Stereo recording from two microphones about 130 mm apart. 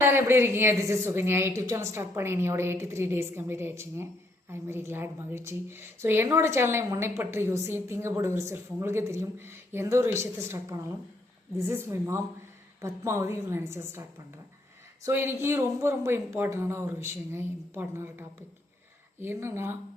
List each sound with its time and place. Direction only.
0.0 s a woman's voice: 20° right (ahead or behind)